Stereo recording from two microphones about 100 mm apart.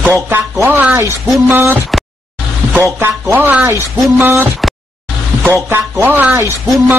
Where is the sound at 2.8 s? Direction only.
25° right (ahead or behind).